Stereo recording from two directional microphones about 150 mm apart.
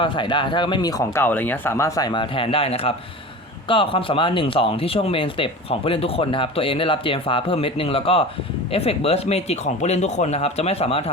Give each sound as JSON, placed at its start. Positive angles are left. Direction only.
{"t": 0.0, "sound": "speech", "side_deg": 30}